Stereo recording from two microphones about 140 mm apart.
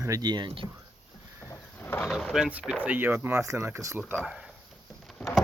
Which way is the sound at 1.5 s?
15° left (ahead or behind).